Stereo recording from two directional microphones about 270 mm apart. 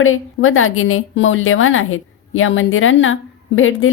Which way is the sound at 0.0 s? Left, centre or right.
Left.